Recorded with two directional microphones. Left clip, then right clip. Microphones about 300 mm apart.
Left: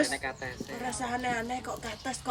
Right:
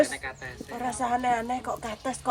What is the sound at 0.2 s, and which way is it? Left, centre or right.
Speech, left.